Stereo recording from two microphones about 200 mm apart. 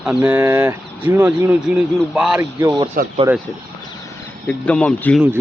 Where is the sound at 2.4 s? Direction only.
15° right (ahead or behind).